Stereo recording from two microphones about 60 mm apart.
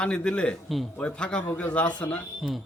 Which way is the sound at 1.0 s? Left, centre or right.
Centre.